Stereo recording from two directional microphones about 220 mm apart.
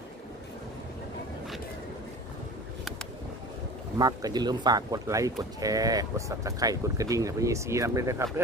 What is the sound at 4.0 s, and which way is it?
Speech, 15° right (ahead or behind).